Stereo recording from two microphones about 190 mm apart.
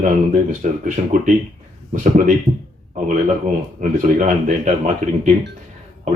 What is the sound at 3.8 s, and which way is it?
Speech, 40° right (ahead or behind).